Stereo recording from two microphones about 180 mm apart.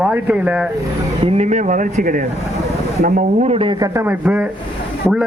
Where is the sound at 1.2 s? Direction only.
40° right (ahead or behind).